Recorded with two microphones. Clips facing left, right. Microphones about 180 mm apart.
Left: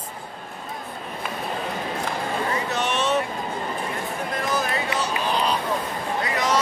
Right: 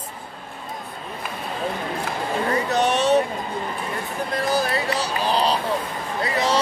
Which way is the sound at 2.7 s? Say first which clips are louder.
Right 6 dB; 35° right (ahead or behind).